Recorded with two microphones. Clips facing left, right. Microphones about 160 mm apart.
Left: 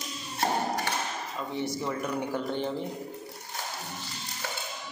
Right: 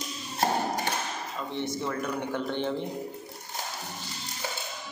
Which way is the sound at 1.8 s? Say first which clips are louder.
Even; 10° left (ahead or behind).